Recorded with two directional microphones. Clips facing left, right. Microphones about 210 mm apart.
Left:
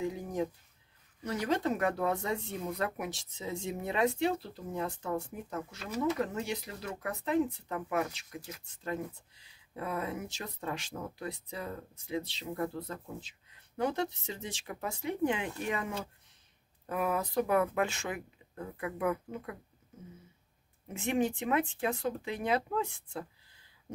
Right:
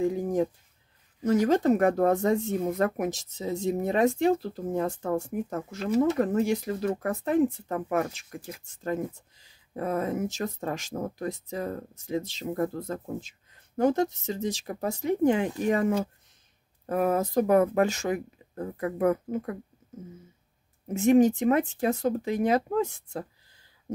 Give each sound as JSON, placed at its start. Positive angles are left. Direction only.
{"t": 0.0, "sound": "a sound", "side_deg": -50}
{"t": 1.2, "sound": "speech", "side_deg": -45}
{"t": 20.9, "sound": "speech", "side_deg": -40}